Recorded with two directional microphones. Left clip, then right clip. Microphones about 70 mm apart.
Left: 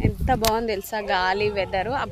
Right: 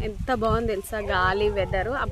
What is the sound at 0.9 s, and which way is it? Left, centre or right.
Speech, right.